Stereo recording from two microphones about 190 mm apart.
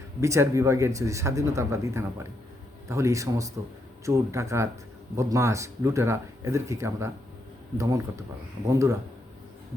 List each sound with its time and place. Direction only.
0.2 s speech: 15° right (ahead or behind)